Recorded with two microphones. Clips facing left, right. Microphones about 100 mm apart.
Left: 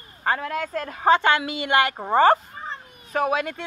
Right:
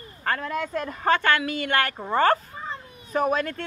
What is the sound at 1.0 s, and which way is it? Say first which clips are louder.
Speech: left 4 dB; 15° left (ahead or behind).